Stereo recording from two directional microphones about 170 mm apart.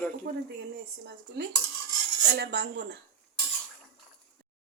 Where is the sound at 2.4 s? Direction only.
75° right (ahead or behind).